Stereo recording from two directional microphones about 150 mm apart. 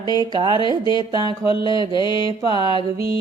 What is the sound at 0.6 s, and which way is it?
Mantra, 30° left (ahead or behind).